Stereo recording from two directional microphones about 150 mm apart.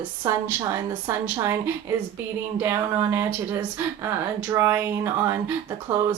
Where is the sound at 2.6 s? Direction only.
15° right (ahead or behind).